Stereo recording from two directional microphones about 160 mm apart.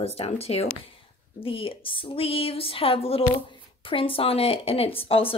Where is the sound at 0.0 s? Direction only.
40° left (ahead or behind).